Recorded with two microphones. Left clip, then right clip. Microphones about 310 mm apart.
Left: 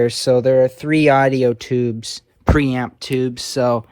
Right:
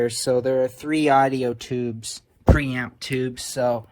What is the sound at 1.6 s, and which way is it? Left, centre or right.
Speech, left.